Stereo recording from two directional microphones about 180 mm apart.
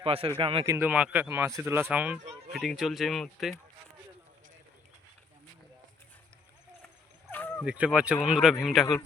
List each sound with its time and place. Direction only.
0.0 s speech: 30° right (ahead or behind)
0.6 s speech: 15° right (ahead or behind)
7.3 s a sound: 10° left (ahead or behind)
7.6 s speech: 5° right (ahead or behind)